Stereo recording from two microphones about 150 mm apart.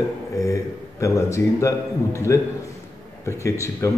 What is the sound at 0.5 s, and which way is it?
Speech, 20° left (ahead or behind).